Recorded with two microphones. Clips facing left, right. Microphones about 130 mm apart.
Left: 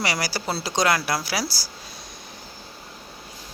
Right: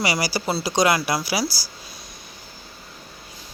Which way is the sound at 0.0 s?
5° right (ahead or behind).